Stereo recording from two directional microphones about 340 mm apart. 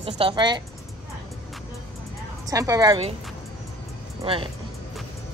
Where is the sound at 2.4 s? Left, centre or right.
Centre.